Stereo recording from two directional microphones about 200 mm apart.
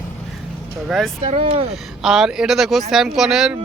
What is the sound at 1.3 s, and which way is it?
Speech, 30° right (ahead or behind).